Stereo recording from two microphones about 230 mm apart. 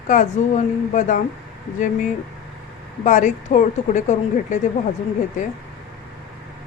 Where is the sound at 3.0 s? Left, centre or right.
Left.